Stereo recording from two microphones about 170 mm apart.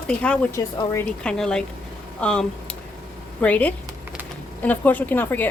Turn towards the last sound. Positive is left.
turn(degrees=10)  # may be behind; listen again after turning